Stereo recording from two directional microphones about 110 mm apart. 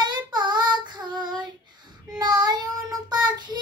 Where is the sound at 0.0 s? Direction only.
40° right (ahead or behind).